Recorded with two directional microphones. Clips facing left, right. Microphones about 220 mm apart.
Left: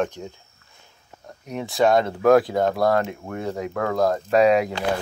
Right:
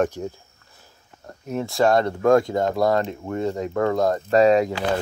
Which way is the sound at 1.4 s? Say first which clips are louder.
Even; centre (ahead or behind).